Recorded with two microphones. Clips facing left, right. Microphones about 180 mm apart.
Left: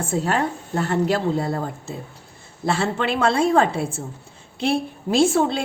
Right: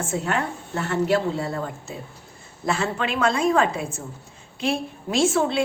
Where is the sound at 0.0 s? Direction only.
35° left (ahead or behind).